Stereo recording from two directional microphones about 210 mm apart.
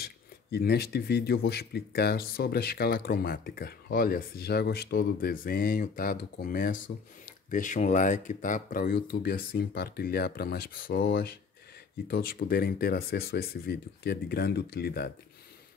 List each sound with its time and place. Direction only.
0.0 s speech: 50° left (ahead or behind)